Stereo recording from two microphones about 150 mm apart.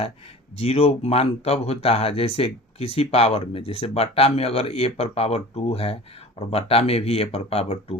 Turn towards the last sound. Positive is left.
turn(degrees=40)  # may be behind; listen again after turning